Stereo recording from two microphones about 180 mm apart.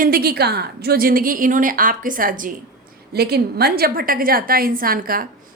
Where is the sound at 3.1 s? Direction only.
60° right (ahead or behind).